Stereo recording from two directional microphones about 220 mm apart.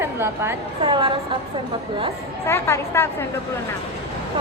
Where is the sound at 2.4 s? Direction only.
10° left (ahead or behind).